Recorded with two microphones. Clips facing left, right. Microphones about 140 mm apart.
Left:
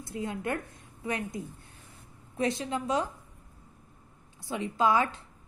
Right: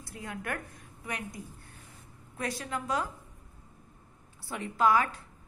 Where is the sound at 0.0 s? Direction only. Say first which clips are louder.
Left 6 dB; 25° left (ahead or behind).